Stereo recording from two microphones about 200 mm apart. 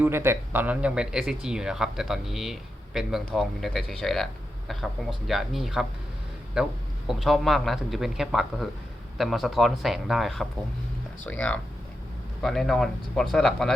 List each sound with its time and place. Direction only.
0.0 s speech: 10° right (ahead or behind)